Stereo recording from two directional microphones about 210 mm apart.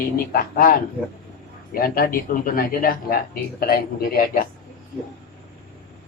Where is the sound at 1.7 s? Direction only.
45° left (ahead or behind).